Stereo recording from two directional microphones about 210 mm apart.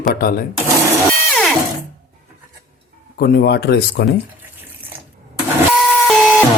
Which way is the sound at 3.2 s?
50° left (ahead or behind).